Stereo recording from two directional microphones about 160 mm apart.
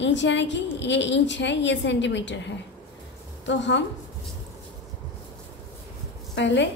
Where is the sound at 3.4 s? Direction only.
90° left.